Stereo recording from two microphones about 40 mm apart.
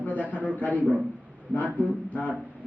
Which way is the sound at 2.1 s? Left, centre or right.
Left.